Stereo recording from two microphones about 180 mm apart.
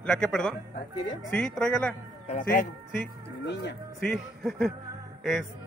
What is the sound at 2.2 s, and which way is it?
Speech, 45° left (ahead or behind).